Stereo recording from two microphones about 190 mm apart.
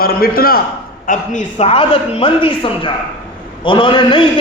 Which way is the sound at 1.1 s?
35° left (ahead or behind).